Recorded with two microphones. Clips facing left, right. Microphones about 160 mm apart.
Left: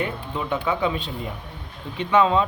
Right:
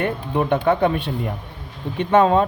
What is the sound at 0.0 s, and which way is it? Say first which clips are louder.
Speech: right 6 dB; 60° right (ahead or behind).